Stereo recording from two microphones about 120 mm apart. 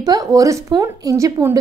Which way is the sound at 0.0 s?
30° right (ahead or behind).